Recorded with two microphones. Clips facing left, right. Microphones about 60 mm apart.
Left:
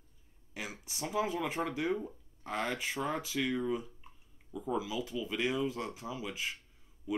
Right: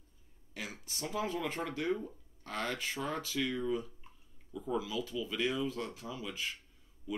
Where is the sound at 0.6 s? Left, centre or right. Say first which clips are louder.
Left 1 dB; centre.